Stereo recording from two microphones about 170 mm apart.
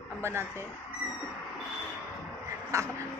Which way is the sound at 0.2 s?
15° right (ahead or behind).